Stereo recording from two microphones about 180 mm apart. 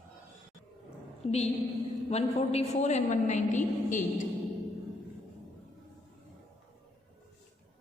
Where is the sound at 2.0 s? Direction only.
35° left (ahead or behind).